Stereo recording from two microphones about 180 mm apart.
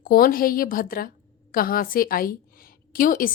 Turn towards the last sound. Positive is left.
turn(degrees=50)  # may be behind; listen again after turning